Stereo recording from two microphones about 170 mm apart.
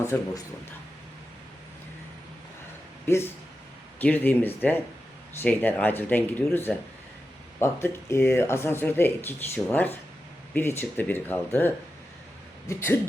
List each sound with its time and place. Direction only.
0.0 s speech: 15° left (ahead or behind)
4.0 s speech: 10° left (ahead or behind)